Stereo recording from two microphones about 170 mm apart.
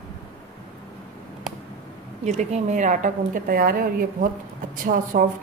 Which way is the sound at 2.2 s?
40° right (ahead or behind).